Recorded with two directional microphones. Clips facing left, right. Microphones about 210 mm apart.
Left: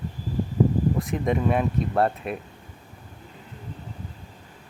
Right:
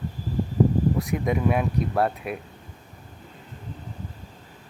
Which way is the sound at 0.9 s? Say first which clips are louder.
Even; centre (ahead or behind).